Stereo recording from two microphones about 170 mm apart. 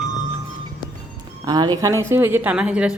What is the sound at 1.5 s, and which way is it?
A woman's voice, 25° right (ahead or behind).